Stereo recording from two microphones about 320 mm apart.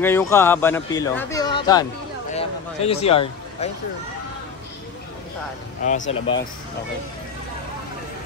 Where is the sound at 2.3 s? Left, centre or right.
Centre.